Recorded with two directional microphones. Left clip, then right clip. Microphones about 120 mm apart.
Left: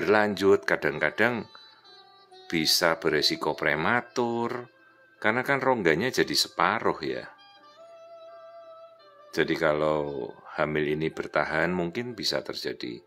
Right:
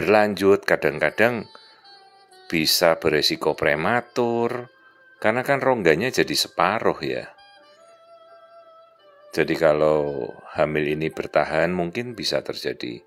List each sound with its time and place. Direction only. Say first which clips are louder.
0.0 s speech: right 5 dB; 30° right (ahead or behind)
2.4 s speech: right 5 dB; 30° right (ahead or behind)
9.3 s speech: right 6 dB; 30° right (ahead or behind)